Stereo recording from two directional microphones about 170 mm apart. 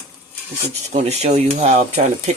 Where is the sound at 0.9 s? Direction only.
40° right (ahead or behind).